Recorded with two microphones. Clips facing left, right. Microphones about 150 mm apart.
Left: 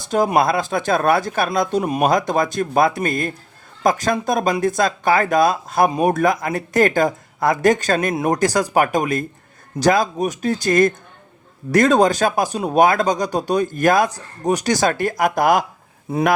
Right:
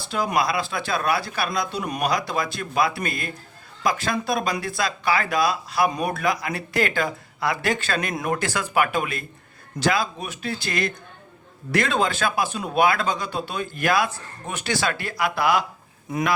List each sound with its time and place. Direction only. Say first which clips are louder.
0.3 s speech: left 6 dB; 50° left (ahead or behind)